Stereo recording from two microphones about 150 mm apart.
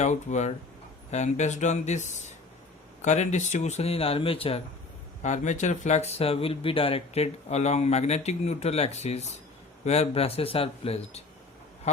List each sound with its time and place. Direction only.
0.0 s speech: 50° left (ahead or behind)
5.2 s speech: 50° left (ahead or behind)